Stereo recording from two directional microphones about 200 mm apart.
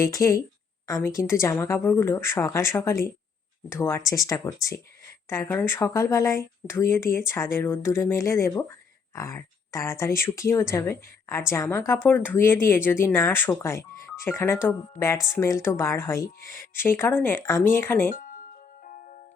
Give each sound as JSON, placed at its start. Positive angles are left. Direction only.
{"t": 0.0, "sound": "speech", "side_deg": 15}
{"t": 18.1, "sound": "music", "side_deg": 40}